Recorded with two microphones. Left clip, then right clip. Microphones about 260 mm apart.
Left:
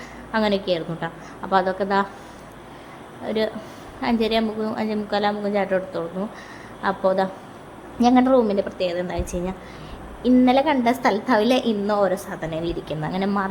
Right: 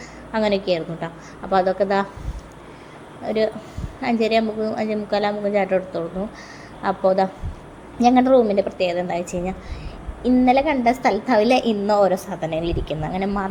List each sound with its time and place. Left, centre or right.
0.3 s a woman's voice: centre
3.2 s a woman's voice: centre